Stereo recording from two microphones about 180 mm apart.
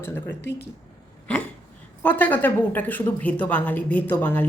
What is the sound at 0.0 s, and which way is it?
Speech, 10° left (ahead or behind).